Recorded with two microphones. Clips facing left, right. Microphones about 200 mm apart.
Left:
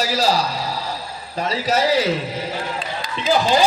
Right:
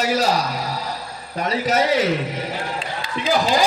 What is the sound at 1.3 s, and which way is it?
Speech, 30° left (ahead or behind).